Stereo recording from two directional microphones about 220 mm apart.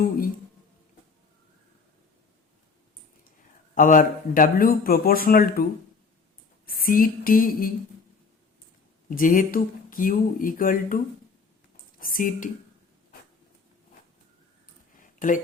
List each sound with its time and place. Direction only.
3.8 s speech: 40° left (ahead or behind)
6.7 s speech: 40° left (ahead or behind)
9.0 s speech: 40° left (ahead or behind)
14.9 s a sound: 35° left (ahead or behind)